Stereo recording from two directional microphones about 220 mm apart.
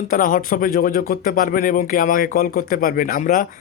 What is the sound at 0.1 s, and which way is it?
Speech, 40° left (ahead or behind).